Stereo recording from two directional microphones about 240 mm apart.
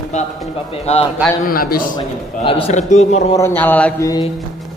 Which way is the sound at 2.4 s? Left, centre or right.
Left.